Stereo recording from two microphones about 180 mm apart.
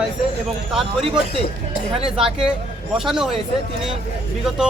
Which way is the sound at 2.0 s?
5° right (ahead or behind).